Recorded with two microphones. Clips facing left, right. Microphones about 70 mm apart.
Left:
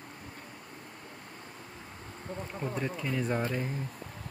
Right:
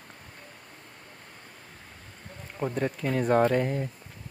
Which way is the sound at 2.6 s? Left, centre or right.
Right.